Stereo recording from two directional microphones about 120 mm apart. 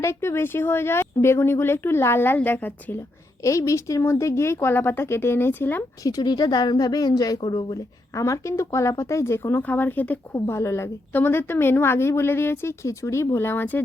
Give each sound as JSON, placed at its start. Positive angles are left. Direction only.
{"t": 0.0, "sound": "a woman's voice", "side_deg": 20}
{"t": 3.4, "sound": "a woman's voice", "side_deg": 25}
{"t": 6.0, "sound": "a woman's voice", "side_deg": 30}